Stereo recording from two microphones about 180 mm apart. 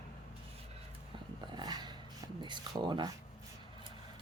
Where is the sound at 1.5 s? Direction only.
25° right (ahead or behind).